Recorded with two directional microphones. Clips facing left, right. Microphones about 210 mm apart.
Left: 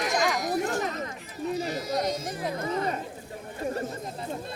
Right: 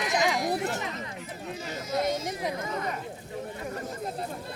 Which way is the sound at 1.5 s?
35° left (ahead or behind).